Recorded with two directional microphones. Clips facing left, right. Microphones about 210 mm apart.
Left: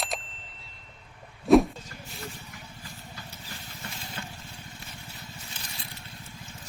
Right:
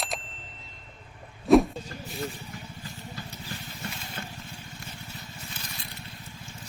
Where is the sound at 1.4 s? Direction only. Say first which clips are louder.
Even; centre (ahead or behind).